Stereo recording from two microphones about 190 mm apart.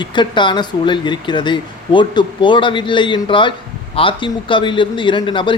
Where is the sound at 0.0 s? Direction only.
25° left (ahead or behind).